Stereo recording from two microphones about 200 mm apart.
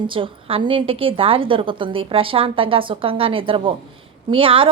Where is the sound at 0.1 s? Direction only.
25° right (ahead or behind).